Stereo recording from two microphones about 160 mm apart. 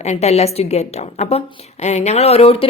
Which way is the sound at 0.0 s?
45° left (ahead or behind).